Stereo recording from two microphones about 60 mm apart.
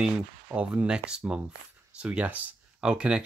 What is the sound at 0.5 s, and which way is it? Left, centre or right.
Speech, right.